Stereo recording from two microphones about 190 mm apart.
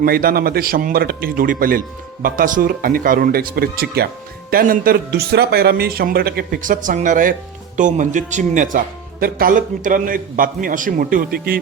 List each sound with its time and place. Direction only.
0.0 s a man's voice: 50° right (ahead or behind)